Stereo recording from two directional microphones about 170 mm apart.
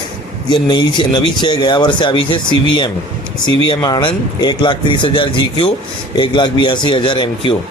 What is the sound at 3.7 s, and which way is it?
A man's voice, 25° left (ahead or behind).